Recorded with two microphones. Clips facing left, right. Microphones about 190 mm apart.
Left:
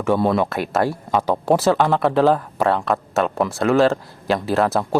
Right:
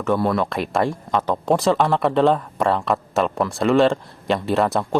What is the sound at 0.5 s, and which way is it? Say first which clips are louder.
Speech: left 1 dB; 5° left (ahead or behind).